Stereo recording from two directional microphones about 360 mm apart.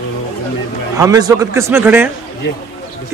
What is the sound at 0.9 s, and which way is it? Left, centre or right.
A man's voice, centre.